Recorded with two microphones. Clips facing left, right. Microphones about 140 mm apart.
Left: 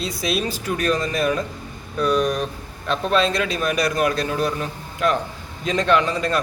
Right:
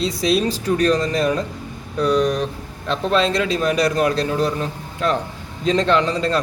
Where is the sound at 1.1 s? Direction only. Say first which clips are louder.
Right 2 dB; 35° right (ahead or behind).